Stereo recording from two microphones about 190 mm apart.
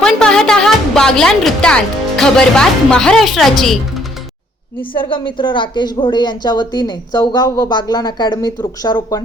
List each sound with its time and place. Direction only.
0.0 s speech: 5° left (ahead or behind)
5.0 s speech: 25° left (ahead or behind)